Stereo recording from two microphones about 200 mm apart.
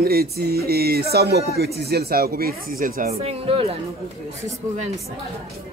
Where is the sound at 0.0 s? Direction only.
50° right (ahead or behind).